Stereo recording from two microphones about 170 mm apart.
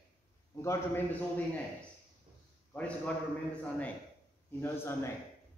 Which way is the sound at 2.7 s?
10° left (ahead or behind).